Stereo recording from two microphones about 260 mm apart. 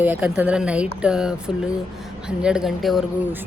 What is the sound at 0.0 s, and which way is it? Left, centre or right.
Speech, centre.